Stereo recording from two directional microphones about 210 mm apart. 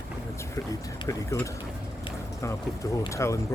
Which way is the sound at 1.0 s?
15° left (ahead or behind).